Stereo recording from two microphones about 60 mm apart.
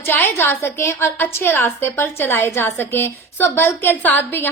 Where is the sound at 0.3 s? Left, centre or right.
Left.